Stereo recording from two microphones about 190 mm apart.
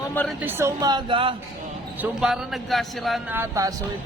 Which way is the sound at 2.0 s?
5° right (ahead or behind).